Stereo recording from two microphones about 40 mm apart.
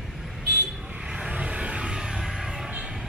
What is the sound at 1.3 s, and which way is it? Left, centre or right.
Vehicle, right.